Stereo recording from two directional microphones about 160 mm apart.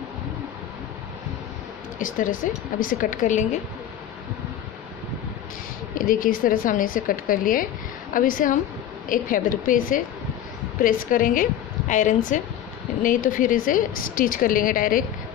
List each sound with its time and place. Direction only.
2.0 s a woman's voice: 55° left (ahead or behind)
5.9 s a woman's voice: 60° left (ahead or behind)